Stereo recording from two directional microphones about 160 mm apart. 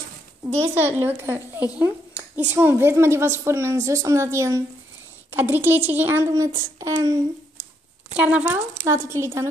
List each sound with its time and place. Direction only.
0.6 s speech: 15° right (ahead or behind)
8.2 s speech: 10° right (ahead or behind)